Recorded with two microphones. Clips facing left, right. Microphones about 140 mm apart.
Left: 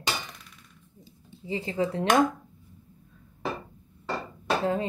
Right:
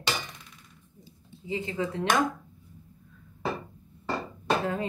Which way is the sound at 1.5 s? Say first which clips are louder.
Left 2 dB; 35° left (ahead or behind).